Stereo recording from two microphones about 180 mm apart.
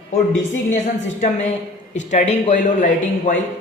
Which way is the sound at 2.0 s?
40° left (ahead or behind).